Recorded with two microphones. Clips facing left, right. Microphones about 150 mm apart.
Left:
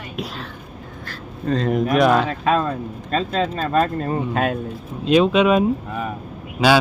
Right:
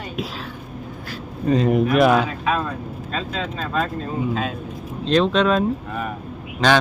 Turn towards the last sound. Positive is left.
turn(degrees=10)  # may be behind; listen again after turning